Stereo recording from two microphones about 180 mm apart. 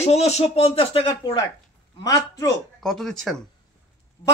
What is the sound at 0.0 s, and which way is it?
Speech, 35° left (ahead or behind).